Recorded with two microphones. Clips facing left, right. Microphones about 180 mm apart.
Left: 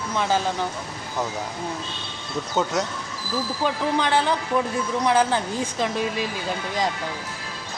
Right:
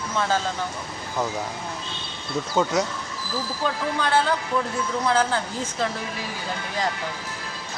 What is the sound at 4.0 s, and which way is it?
Speech, 20° left (ahead or behind).